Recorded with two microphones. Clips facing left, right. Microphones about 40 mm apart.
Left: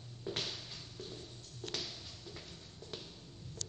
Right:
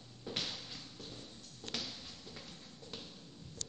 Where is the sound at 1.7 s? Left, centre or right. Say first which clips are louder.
Right 1 dB; right.